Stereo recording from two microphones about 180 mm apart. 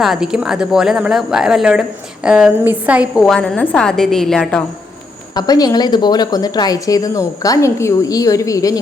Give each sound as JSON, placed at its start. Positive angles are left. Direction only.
{"t": 0.0, "sound": "a woman's voice", "side_deg": 0}
{"t": 5.3, "sound": "a woman's voice", "side_deg": 20}